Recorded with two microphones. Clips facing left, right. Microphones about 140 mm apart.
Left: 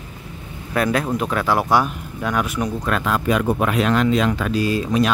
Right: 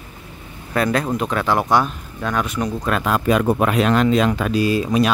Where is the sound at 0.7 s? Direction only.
5° left (ahead or behind).